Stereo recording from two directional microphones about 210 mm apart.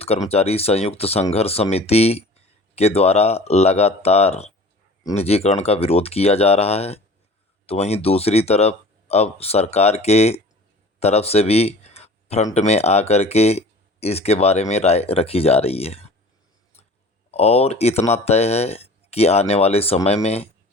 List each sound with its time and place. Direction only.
0.0 s speech: 30° left (ahead or behind)
17.3 s speech: 30° left (ahead or behind)